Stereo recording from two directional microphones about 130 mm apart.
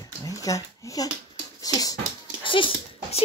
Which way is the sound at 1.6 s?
30° left (ahead or behind).